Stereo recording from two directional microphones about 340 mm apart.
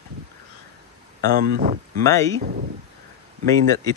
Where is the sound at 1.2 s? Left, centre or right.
Right.